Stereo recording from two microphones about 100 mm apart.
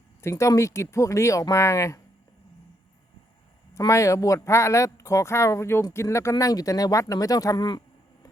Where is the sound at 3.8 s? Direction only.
30° left (ahead or behind).